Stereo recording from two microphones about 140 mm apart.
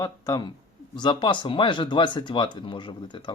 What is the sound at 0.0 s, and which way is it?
Speech, 30° left (ahead or behind).